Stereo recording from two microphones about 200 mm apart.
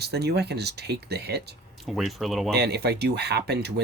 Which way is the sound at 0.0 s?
55° right (ahead or behind).